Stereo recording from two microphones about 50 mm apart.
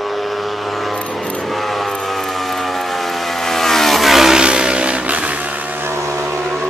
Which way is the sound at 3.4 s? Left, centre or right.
Centre.